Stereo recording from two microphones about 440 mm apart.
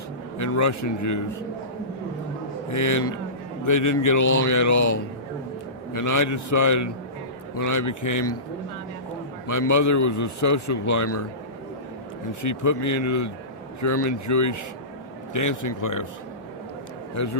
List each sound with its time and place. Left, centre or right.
0.3 s a man's voice: left
2.6 s a man's voice: left
9.5 s a man's voice: left
12.4 s a man's voice: left